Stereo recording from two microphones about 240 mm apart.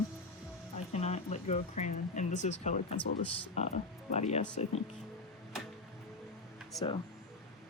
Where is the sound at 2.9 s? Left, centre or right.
Left.